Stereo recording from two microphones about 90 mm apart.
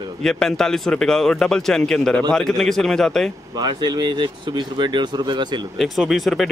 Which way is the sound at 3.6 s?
55° right (ahead or behind).